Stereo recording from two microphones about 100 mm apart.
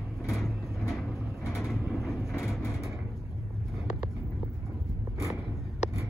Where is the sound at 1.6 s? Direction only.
Centre (ahead or behind).